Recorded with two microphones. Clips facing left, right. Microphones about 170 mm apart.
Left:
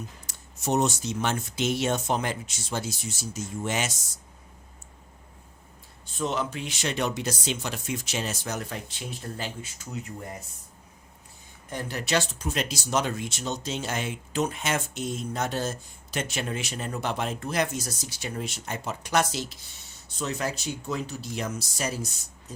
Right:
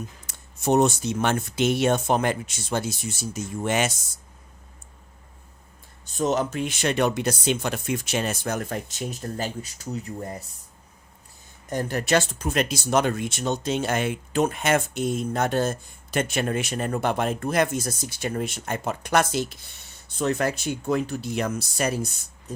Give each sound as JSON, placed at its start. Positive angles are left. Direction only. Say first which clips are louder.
{"t": 0.3, "sound": "speech", "louder": "right 6 dB", "side_deg": -55}
{"t": 6.1, "sound": "speech", "louder": "right 5 dB", "side_deg": -45}
{"t": 11.7, "sound": "speech", "louder": "right 5 dB", "side_deg": -45}